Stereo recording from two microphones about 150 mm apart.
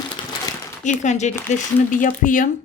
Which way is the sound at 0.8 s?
55° left (ahead or behind).